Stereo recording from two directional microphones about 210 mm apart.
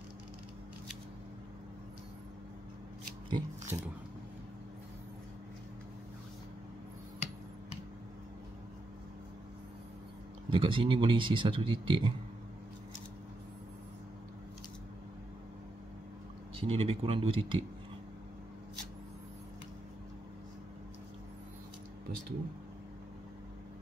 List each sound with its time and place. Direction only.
3.3 s speech: 20° right (ahead or behind)
10.5 s speech: 25° right (ahead or behind)
16.5 s speech: 25° right (ahead or behind)